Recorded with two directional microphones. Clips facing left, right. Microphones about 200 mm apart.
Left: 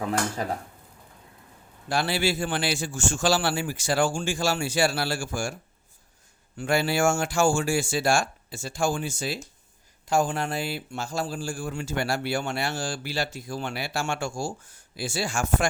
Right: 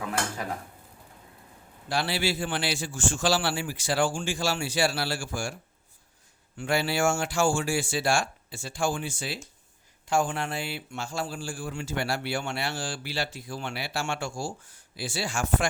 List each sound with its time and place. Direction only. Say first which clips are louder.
1.9 s a man's voice: left 3 dB; 50° left (ahead or behind)
6.6 s a man's voice: left 2 dB; 45° left (ahead or behind)